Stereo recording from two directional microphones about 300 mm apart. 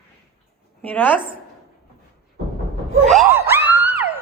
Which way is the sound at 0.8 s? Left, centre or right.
Centre.